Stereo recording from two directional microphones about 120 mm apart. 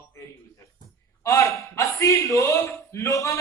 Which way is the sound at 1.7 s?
25° left (ahead or behind).